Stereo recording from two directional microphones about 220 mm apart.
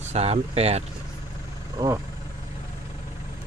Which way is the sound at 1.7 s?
15° right (ahead or behind).